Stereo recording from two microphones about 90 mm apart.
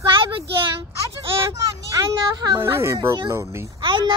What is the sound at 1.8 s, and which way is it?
Speech, 45° right (ahead or behind).